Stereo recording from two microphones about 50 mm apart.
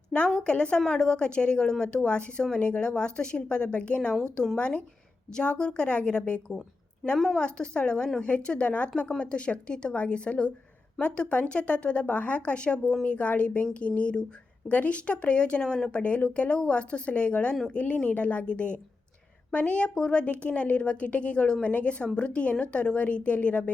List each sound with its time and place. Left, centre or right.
0.1 s a woman's voice: left
16.0 s a woman's voice: left